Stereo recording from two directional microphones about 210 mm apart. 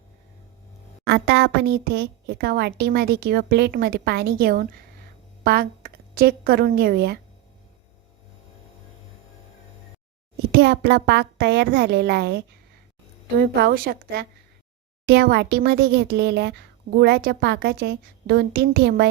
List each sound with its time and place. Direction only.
1.0 s a woman's voice: 55° right (ahead or behind)
10.5 s speech: 50° right (ahead or behind)